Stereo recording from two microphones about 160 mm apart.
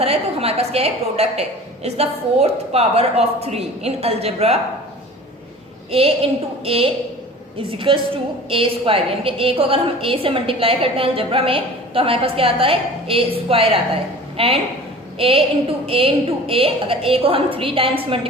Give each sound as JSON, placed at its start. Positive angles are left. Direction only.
{"t": 0.0, "sound": "a woman's voice", "side_deg": -40}
{"t": 5.9, "sound": "a woman's voice", "side_deg": -40}